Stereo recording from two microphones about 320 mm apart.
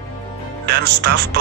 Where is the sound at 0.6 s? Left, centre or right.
Right.